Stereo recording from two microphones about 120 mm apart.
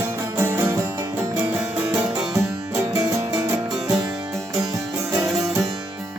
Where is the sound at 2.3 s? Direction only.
30° right (ahead or behind).